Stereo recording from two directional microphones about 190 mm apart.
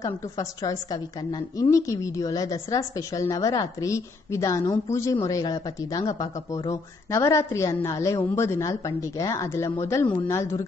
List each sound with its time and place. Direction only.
0.0 s a woman's voice: 20° left (ahead or behind)